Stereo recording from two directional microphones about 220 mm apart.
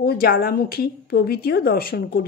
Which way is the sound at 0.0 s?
45° left (ahead or behind).